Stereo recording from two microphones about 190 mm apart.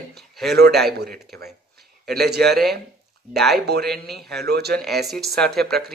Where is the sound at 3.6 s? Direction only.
55° right (ahead or behind).